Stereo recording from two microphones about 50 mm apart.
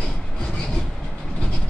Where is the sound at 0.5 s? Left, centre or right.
Centre.